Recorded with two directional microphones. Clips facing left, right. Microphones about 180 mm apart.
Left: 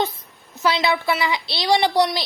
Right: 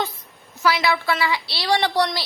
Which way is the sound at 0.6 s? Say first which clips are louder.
Left 1 dB; 20° left (ahead or behind).